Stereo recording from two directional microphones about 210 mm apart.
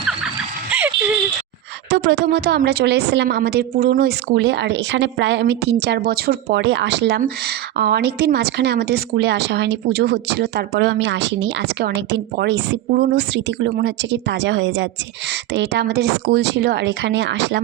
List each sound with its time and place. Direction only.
0.7 s music: 10° right (ahead or behind)
1.9 s speech: 55° right (ahead or behind)